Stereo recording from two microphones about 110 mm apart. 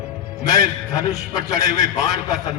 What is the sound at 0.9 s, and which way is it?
Speech, 35° left (ahead or behind).